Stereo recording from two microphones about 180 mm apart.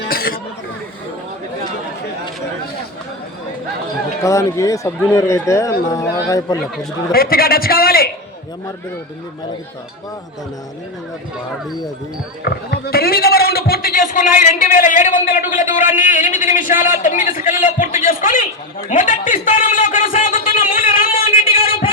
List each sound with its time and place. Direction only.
0.1 s chatter: 55° left (ahead or behind)
4.2 s a man's voice: 15° left (ahead or behind)
7.1 s a man's voice: 55° left (ahead or behind)
12.5 s a man's voice: 60° left (ahead or behind)
20.7 s a sound: 50° left (ahead or behind)
21.5 s a sound: 30° left (ahead or behind)